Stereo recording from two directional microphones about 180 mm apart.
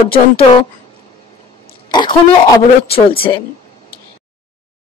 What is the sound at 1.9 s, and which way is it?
Speech, 25° left (ahead or behind).